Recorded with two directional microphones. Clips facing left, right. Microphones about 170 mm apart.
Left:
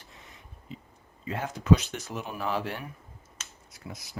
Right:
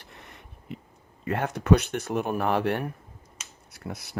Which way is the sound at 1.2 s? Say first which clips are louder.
Right 6 dB; 65° right (ahead or behind).